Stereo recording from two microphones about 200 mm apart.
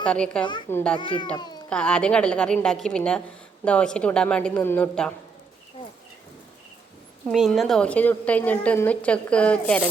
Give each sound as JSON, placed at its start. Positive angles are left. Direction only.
{"t": 0.0, "sound": "a woman's voice", "side_deg": 5}
{"t": 0.9, "sound": "speech", "side_deg": 25}
{"t": 1.7, "sound": "a woman's voice", "side_deg": 5}
{"t": 7.3, "sound": "a woman's voice", "side_deg": 0}